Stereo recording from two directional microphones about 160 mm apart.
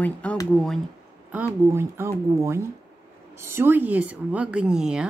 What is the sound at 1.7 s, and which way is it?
A woman's voice, 15° right (ahead or behind).